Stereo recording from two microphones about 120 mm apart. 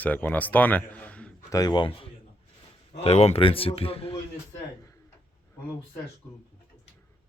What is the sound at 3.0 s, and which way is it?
A man's voice, 60° left (ahead or behind).